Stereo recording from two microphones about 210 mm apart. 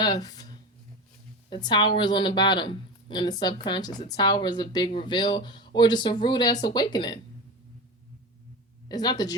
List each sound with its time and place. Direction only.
0.0 s a sound: 20° left (ahead or behind)
1.5 s a woman's voice: 20° left (ahead or behind)
8.9 s a woman's voice: 20° left (ahead or behind)